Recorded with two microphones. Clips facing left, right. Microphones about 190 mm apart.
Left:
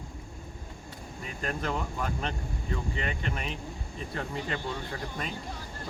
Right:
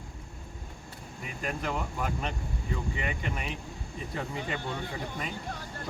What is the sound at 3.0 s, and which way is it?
Speech, 10° right (ahead or behind).